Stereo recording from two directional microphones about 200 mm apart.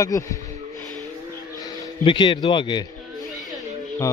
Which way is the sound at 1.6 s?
20° left (ahead or behind).